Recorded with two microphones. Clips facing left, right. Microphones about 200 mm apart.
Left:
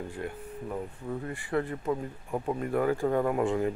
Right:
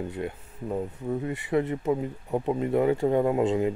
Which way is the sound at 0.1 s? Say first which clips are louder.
Right 3 dB; 25° right (ahead or behind).